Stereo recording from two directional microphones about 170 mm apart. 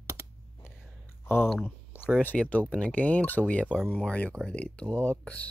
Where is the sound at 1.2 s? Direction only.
15° left (ahead or behind).